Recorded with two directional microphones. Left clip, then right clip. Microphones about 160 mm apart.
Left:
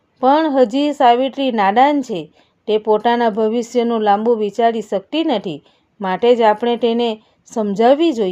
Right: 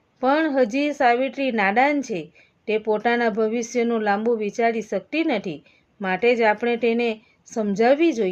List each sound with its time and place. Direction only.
0.2 s a woman's voice: 35° left (ahead or behind)